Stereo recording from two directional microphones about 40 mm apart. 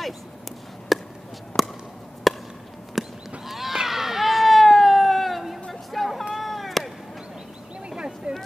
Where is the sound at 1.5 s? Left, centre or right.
Left.